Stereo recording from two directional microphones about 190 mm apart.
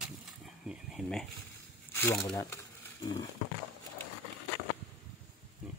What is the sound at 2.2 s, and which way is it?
Speech, 15° left (ahead or behind).